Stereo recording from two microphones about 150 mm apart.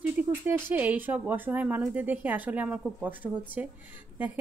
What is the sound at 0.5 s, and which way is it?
Speech, 10° right (ahead or behind).